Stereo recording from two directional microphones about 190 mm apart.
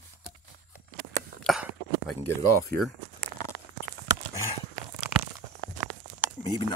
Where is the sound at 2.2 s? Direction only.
15° left (ahead or behind).